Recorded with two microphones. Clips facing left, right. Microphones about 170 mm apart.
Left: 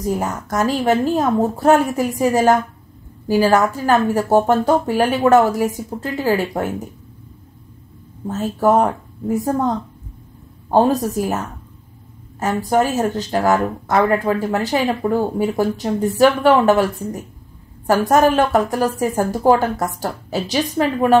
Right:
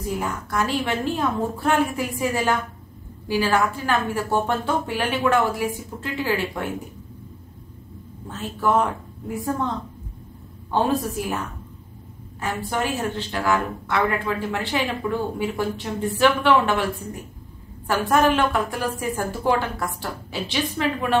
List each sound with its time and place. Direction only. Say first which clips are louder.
0.0 s speech: left 6 dB; 40° left (ahead or behind)
8.3 s speech: left 7 dB; 40° left (ahead or behind)